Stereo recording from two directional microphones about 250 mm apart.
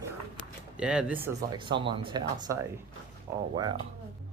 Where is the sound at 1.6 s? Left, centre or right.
Centre.